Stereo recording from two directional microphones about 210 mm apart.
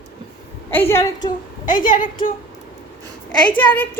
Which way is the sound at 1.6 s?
40° left (ahead or behind).